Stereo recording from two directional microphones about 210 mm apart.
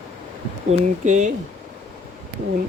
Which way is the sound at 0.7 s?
35° right (ahead or behind).